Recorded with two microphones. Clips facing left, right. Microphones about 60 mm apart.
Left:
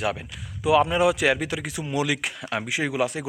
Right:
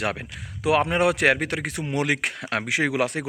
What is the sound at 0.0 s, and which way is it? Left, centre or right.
Speech, right.